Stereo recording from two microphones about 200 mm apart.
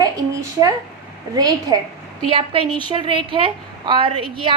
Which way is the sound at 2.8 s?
25° right (ahead or behind).